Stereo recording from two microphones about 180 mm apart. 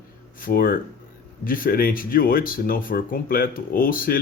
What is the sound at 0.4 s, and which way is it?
Speech, 55° left (ahead or behind).